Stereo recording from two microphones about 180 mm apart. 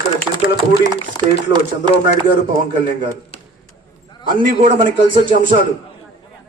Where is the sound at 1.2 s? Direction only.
20° left (ahead or behind).